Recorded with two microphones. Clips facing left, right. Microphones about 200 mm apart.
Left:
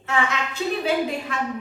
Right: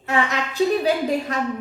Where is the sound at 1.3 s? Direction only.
40° right (ahead or behind).